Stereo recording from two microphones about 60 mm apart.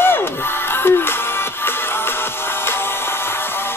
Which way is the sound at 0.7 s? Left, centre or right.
Left.